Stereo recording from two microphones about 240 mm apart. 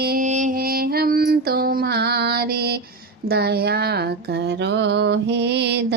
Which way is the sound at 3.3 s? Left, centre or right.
Right.